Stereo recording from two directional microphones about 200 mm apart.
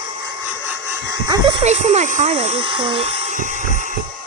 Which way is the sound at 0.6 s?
15° right (ahead or behind).